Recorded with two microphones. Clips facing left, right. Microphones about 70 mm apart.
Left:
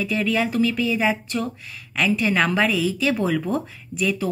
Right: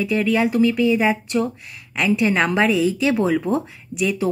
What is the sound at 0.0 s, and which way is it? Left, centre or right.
Speech, centre.